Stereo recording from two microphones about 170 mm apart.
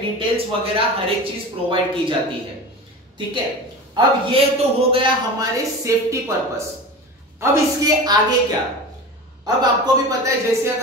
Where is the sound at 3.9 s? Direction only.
35° right (ahead or behind).